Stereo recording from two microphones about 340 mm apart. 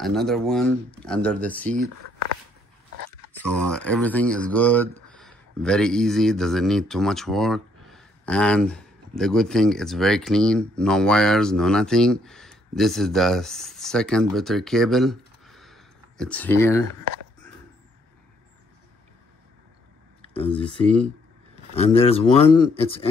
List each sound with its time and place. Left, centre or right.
0.0 s speech: centre
3.1 s speech: centre
21.7 s speech: centre